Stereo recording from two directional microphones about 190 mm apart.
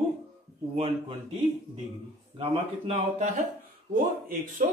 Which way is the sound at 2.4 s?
35° right (ahead or behind).